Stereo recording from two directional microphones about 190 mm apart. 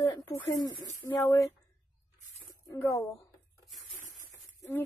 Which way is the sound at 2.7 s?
15° left (ahead or behind).